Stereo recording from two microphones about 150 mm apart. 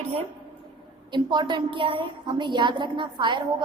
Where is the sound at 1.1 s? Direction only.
30° right (ahead or behind).